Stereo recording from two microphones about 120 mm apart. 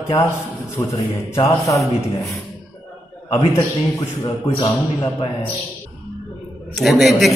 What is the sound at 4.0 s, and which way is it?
Speech, 35° left (ahead or behind).